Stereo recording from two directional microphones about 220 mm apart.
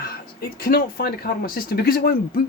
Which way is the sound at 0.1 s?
45° left (ahead or behind).